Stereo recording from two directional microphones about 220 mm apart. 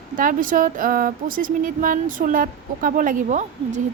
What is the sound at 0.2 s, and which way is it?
Speech, 40° right (ahead or behind).